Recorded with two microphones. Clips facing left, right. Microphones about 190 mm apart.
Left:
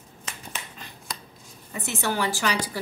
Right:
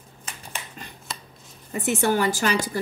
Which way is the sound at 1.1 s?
Centre (ahead or behind).